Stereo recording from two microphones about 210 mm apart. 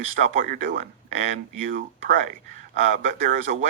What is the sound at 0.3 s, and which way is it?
Speech, 40° right (ahead or behind).